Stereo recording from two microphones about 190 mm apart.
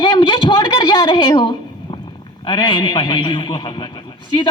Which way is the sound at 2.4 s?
25° left (ahead or behind).